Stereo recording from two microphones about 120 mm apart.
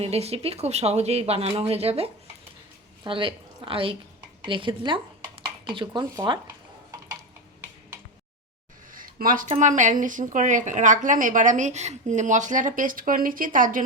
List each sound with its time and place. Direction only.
0.0 s speech: 60° right (ahead or behind)
3.0 s a woman's voice: 45° right (ahead or behind)
9.4 s a woman's voice: 85° right